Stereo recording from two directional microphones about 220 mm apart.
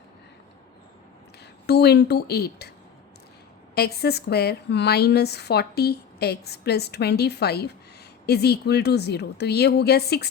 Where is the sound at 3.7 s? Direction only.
45° left (ahead or behind).